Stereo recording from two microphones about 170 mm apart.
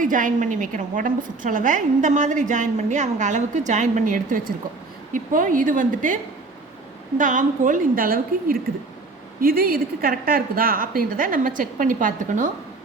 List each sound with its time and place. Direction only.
0.0 s a woman's voice: 50° right (ahead or behind)
7.2 s a woman's voice: 50° right (ahead or behind)